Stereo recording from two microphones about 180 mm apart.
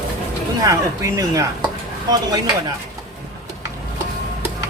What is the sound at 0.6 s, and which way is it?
Speech, 20° right (ahead or behind).